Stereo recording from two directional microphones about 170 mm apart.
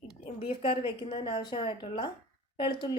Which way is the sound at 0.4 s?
30° left (ahead or behind).